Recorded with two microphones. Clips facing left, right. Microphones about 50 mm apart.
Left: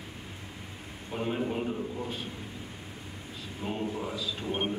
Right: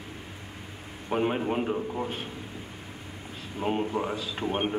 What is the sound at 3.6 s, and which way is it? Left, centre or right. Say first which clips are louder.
Speech: right 6 dB; right.